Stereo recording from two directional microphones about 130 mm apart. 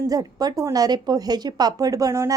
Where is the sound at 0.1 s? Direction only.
30° right (ahead or behind).